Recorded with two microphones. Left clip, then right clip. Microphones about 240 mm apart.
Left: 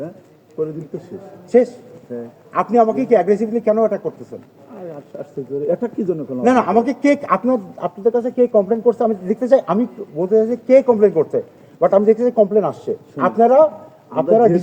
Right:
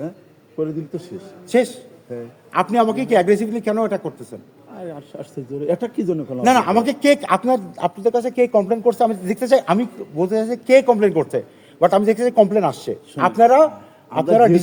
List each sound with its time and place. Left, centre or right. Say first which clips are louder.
2.5 s a man's voice: left 2 dB; right
5.6 s a man's voice: even; right
12.2 s a man's voice: even; right